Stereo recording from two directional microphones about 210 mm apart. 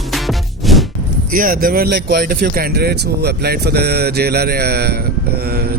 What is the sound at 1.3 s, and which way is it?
Speech, 45° right (ahead or behind).